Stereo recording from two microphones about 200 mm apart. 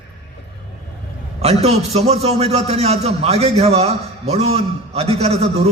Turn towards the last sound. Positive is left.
turn(degrees=-30)  # may be behind; listen again after turning